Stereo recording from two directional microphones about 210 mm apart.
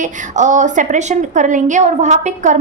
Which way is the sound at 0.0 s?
35° right (ahead or behind).